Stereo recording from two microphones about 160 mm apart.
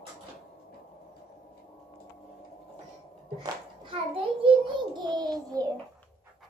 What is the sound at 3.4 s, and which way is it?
Child singing, 30° right (ahead or behind).